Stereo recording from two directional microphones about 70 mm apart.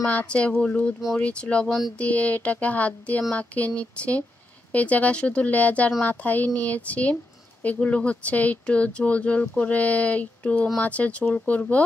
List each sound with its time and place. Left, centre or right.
0.0 s speech: centre
1.7 s speech: centre
2.0 s speech: left